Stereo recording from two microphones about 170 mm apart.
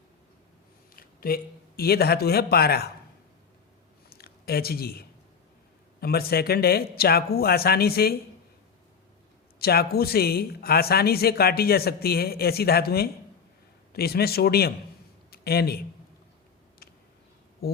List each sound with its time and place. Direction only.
0.9 s speech: 60° left (ahead or behind)
4.1 s a sound: 65° left (ahead or behind)
6.0 s speech: 65° left (ahead or behind)
9.6 s speech: 65° left (ahead or behind)
17.6 s speech: 65° left (ahead or behind)